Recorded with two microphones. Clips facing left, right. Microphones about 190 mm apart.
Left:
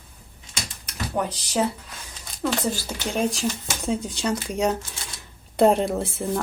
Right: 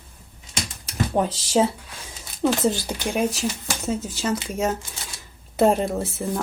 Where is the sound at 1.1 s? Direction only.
25° right (ahead or behind).